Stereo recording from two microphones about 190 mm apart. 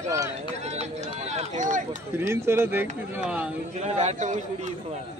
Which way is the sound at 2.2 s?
15° right (ahead or behind).